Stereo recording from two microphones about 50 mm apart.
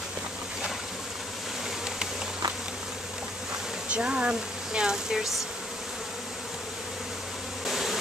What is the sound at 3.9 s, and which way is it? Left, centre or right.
Speech, right.